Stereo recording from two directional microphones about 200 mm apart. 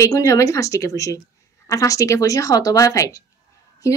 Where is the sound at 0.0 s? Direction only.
15° left (ahead or behind).